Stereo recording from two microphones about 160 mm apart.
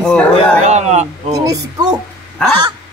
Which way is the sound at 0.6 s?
45° right (ahead or behind).